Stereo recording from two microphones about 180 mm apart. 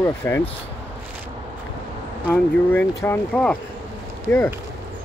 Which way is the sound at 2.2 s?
10° left (ahead or behind).